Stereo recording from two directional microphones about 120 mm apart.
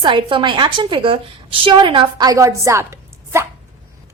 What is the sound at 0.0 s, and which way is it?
A woman's voice, 45° right (ahead or behind).